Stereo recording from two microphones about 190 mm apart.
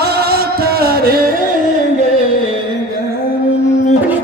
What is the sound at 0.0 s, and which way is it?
Music, 55° right (ahead or behind).